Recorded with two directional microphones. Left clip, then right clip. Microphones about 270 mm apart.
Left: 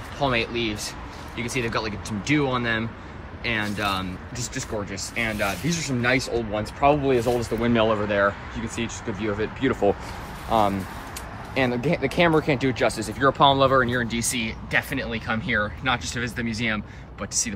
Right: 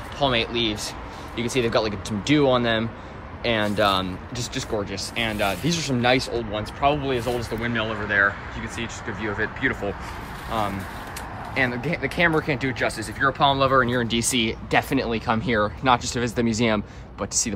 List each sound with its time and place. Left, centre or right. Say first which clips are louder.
0.2 s speech: right 2 dB; centre
7.6 s speech: left 7 dB; centre